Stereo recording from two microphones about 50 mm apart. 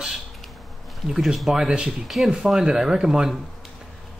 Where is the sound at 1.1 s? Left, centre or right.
Centre.